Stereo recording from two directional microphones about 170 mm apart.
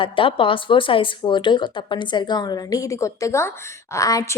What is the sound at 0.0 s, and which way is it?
A woman's voice, 30° left (ahead or behind).